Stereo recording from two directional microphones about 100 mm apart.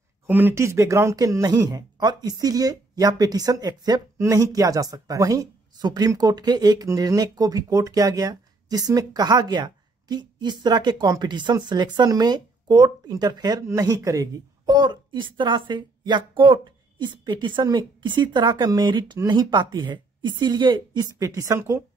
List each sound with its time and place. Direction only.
0.3 s a woman's voice: 20° right (ahead or behind)